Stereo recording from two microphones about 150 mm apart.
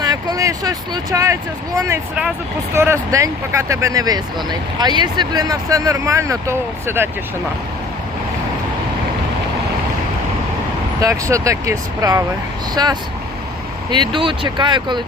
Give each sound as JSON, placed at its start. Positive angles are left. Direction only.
{"t": 0.0, "sound": "speech", "side_deg": -25}
{"t": 2.7, "sound": "speech", "side_deg": -20}
{"t": 11.0, "sound": "speech", "side_deg": -20}